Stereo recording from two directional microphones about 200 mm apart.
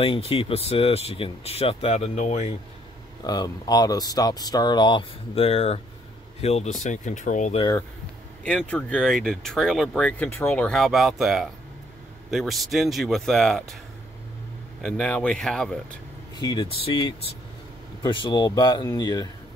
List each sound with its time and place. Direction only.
0.0 s speech: 25° left (ahead or behind)
3.3 s speech: 20° left (ahead or behind); by 7.6 s 35° left (ahead or behind)
8.5 s speech: 5° left (ahead or behind)
14.8 s speech: 5° left (ahead or behind)
16.3 s speech: 20° left (ahead or behind)